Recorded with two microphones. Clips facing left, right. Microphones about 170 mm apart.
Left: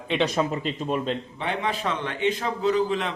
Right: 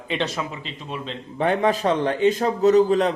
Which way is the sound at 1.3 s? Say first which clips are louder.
Right 8 dB; 45° right (ahead or behind).